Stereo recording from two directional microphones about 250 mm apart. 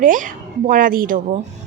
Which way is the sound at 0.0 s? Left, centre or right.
Right.